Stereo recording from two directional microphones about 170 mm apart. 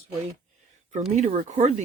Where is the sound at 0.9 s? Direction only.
40° right (ahead or behind).